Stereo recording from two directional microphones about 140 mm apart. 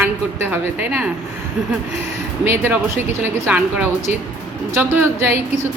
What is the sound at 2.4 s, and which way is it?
Speech, 15° right (ahead or behind).